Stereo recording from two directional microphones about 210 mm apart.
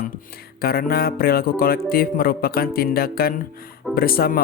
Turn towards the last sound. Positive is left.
turn(degrees=45)  # may be behind; listen again after turning